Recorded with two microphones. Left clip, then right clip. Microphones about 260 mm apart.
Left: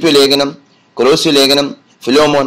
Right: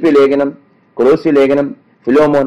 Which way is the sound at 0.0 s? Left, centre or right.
Left.